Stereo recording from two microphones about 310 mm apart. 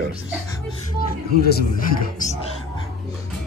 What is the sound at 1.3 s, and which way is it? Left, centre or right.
Speech, left.